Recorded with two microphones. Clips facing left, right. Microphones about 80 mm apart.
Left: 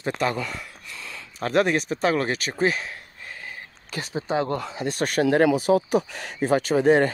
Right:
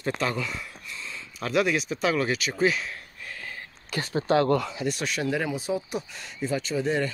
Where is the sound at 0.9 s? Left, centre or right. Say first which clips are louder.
Left 1 dB; left.